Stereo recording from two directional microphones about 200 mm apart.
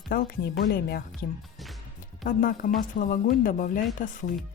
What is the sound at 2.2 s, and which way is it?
Speech, 45° left (ahead or behind).